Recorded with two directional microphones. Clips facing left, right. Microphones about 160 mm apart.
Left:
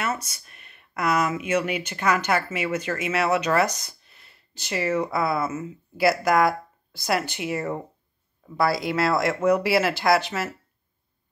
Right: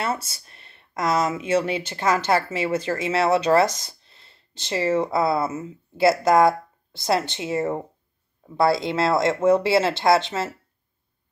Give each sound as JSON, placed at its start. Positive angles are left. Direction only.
{"t": 0.0, "sound": "speech", "side_deg": -30}